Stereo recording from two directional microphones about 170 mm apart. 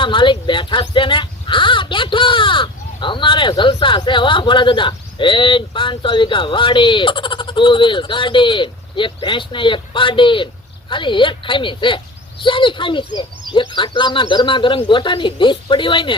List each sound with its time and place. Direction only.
0.0 s speech: 30° left (ahead or behind)